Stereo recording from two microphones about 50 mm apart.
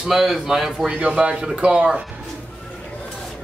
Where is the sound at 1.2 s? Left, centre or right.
Right.